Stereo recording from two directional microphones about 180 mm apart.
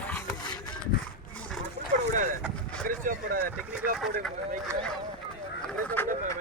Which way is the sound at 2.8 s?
50° right (ahead or behind).